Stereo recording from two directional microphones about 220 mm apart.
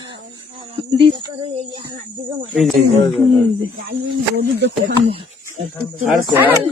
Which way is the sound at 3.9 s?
45° right (ahead or behind).